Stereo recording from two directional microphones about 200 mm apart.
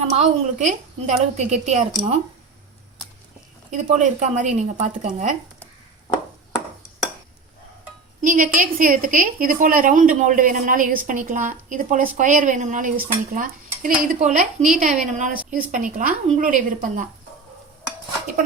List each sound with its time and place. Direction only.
0.0 s a woman's voice: 35° right (ahead or behind)
3.7 s a woman's voice: 35° right (ahead or behind)
8.2 s a woman's voice: 40° right (ahead or behind)
13.3 s dishes: 45° right (ahead or behind)
14.1 s a woman's voice: 40° right (ahead or behind)